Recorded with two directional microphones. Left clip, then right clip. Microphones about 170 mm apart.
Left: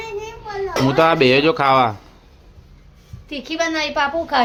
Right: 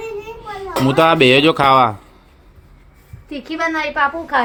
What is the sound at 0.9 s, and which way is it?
A woman's voice, 5° right (ahead or behind).